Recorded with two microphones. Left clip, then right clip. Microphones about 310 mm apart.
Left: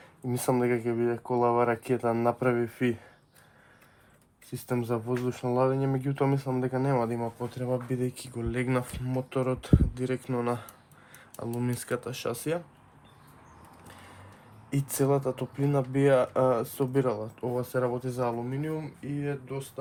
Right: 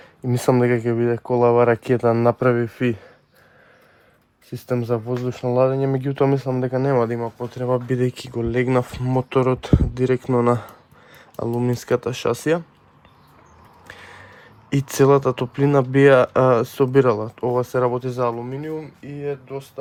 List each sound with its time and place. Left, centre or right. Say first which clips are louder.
0.3 s speech: right 9 dB; right
4.4 s speech: right 8 dB; right
14.7 s speech: right 11 dB; right